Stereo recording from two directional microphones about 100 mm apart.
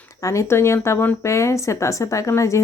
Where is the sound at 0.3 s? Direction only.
30° left (ahead or behind).